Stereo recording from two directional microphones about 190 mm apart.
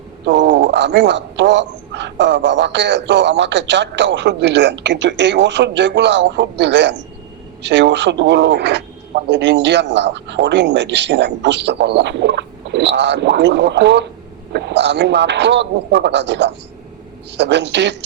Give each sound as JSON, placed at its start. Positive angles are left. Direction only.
{"t": 0.3, "sound": "speech", "side_deg": -65}